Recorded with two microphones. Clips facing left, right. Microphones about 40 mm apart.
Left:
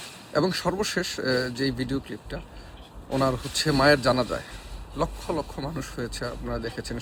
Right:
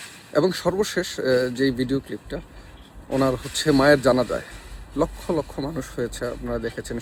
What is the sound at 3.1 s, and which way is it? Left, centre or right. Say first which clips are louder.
Speech: right 3 dB; right.